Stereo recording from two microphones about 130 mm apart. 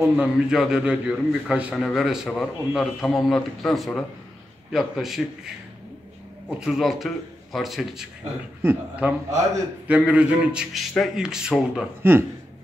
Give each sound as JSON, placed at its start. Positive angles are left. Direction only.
{"t": 0.0, "sound": "a man's voice", "side_deg": -5}
{"t": 6.6, "sound": "a man's voice", "side_deg": 0}
{"t": 12.0, "sound": "speech", "side_deg": -20}